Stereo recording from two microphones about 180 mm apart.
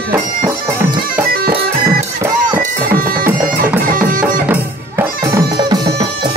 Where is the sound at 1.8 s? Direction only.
15° right (ahead or behind).